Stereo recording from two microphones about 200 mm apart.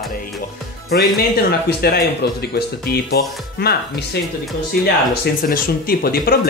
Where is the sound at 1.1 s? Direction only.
55° left (ahead or behind).